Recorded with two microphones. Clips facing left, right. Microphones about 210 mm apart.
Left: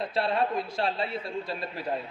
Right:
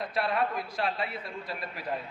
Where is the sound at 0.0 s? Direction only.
25° left (ahead or behind).